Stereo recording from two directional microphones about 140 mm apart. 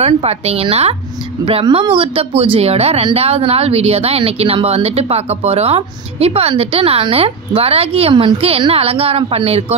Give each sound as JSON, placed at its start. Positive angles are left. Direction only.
{"t": 0.0, "sound": "speech", "side_deg": -45}